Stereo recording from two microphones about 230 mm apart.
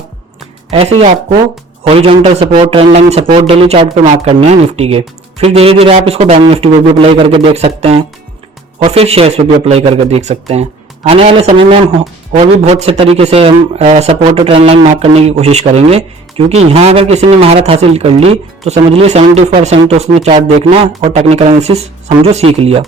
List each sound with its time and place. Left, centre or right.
0.7 s speech: right